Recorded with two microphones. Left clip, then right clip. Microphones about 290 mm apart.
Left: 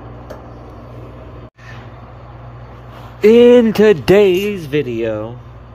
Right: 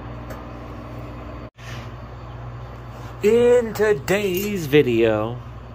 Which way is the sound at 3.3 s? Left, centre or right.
Left.